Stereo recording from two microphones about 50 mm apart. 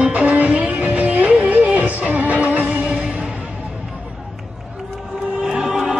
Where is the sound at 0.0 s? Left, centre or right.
Right.